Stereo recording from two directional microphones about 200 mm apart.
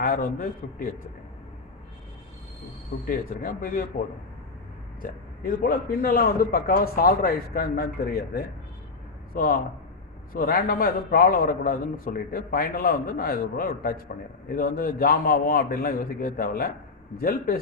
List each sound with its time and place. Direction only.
0.0 s a man's voice: 45° left (ahead or behind)
3.1 s a man's voice: 45° left (ahead or behind)
5.0 s a man's voice: 45° left (ahead or behind)